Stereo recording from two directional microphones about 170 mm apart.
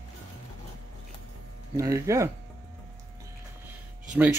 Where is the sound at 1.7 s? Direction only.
20° right (ahead or behind).